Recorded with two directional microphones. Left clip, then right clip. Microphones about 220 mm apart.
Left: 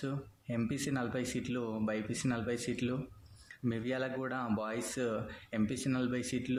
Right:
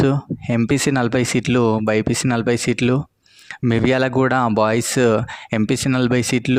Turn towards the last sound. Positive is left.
turn(degrees=-50)  # may be behind; listen again after turning